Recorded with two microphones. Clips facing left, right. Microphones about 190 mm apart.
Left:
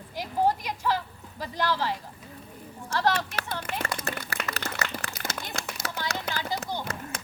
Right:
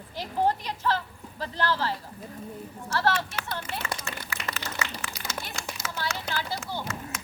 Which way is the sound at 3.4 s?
50° left (ahead or behind).